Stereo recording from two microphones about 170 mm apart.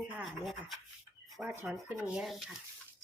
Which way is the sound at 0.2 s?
Centre (ahead or behind).